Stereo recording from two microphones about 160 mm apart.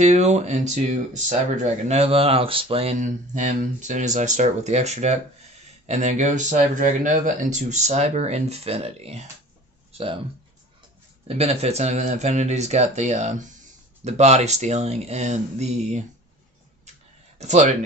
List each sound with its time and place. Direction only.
0.0 s speech: 45° right (ahead or behind)
11.2 s speech: 40° right (ahead or behind)
17.4 s speech: 45° right (ahead or behind)